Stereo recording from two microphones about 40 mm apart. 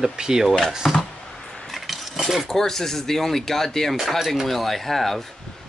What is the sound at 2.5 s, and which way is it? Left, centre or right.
Speech, centre.